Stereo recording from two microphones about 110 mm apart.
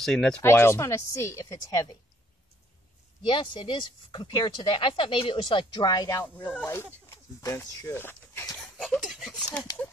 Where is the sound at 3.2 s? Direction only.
45° left (ahead or behind).